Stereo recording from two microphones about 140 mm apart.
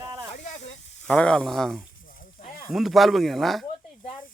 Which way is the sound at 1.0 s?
10° left (ahead or behind).